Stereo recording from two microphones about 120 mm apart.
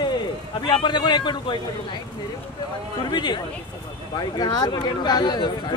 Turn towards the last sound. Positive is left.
turn(degrees=40)  # may be behind; listen again after turning